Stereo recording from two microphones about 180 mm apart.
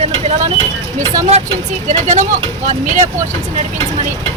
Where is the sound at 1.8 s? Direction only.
40° right (ahead or behind).